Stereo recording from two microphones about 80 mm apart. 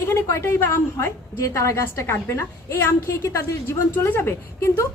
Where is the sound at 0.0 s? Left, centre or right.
Left.